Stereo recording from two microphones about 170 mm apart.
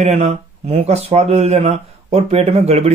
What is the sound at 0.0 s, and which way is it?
Speech, 40° right (ahead or behind).